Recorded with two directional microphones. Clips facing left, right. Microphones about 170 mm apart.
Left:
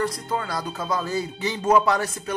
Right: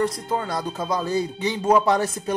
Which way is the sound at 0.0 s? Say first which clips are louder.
Right 2 dB; 20° right (ahead or behind).